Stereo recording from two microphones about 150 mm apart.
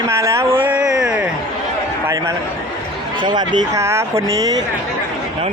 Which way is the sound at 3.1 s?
30° right (ahead or behind).